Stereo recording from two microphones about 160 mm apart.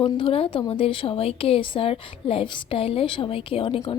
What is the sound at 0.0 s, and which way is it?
A woman's voice, 35° left (ahead or behind).